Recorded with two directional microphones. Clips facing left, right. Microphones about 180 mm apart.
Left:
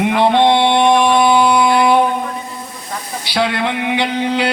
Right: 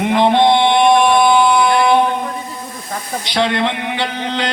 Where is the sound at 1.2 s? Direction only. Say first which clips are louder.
Even; 10° left (ahead or behind).